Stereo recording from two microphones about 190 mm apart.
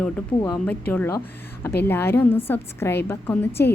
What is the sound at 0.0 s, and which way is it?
A woman's voice, 15° left (ahead or behind).